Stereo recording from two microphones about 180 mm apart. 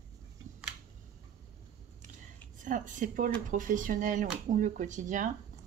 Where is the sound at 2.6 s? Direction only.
45° right (ahead or behind).